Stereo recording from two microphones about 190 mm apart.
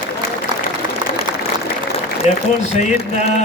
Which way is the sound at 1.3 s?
25° right (ahead or behind).